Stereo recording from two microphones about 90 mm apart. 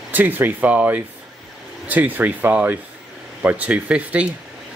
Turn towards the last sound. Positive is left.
turn(degrees=-15)  # may be behind; listen again after turning